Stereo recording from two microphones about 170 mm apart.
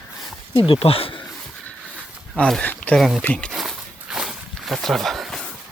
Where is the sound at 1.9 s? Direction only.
5° right (ahead or behind).